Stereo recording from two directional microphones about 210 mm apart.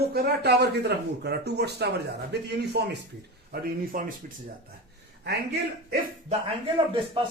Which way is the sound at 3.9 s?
40° right (ahead or behind).